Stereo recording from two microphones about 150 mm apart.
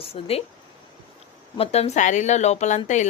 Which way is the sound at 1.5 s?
45° left (ahead or behind).